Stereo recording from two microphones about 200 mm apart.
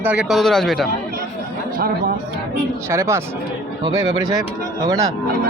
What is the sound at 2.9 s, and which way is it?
Speech, 15° right (ahead or behind).